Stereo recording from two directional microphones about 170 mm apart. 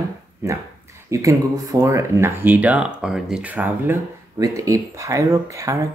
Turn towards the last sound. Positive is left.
turn(degrees=-15)  # may be behind; listen again after turning